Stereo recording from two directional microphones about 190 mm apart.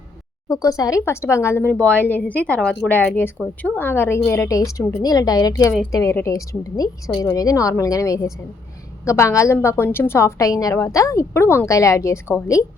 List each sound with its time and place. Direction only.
0.4 s a woman's voice: 20° left (ahead or behind)